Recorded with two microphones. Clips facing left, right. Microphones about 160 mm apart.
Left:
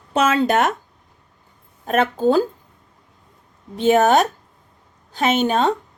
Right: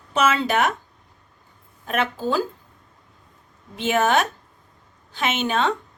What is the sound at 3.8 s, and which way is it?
A woman's voice, 40° left (ahead or behind).